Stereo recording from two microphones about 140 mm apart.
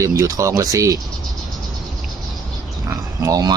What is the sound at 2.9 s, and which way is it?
Oink, 25° right (ahead or behind).